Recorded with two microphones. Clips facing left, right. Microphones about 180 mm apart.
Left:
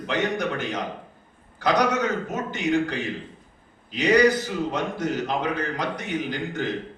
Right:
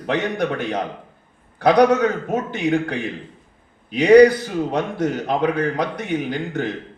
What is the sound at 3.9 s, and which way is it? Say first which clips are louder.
A man's voice: right 8 dB; 65° right (ahead or behind).